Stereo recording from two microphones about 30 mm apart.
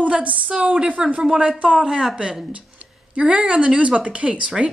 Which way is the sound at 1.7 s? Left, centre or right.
Right.